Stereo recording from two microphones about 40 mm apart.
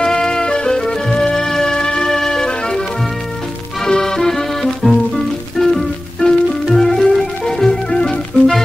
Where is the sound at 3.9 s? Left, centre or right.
Centre.